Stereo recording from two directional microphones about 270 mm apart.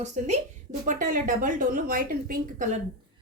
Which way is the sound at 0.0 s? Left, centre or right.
Right.